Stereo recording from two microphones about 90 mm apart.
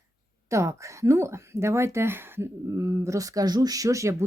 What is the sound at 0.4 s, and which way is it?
Speech, 35° right (ahead or behind).